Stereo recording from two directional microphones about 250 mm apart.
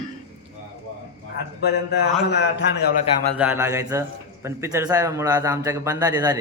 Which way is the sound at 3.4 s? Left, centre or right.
Centre.